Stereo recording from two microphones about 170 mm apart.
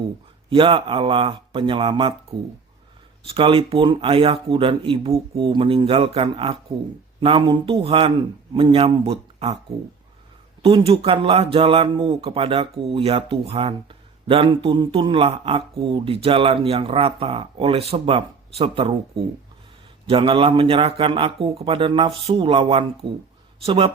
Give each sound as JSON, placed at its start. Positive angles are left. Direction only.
{"t": 0.5, "sound": "speech", "side_deg": -30}
{"t": 3.2, "sound": "speech", "side_deg": -30}
{"t": 10.6, "sound": "speech", "side_deg": -35}
{"t": 20.1, "sound": "speech", "side_deg": -30}